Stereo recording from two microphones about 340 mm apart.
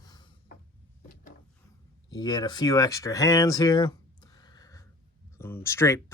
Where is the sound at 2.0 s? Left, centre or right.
Centre.